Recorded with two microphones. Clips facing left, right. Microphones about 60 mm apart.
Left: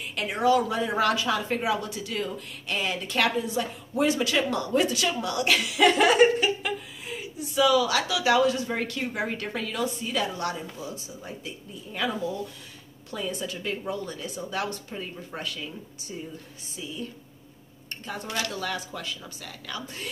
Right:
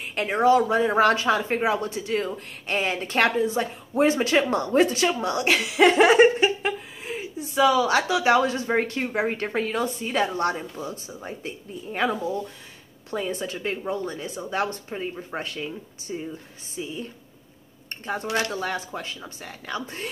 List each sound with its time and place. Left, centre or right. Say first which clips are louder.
0.0 s speech: right 4 dB; right
13.1 s speech: right 4 dB; right